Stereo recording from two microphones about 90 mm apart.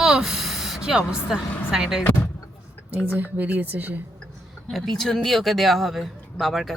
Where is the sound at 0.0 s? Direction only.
5° right (ahead or behind).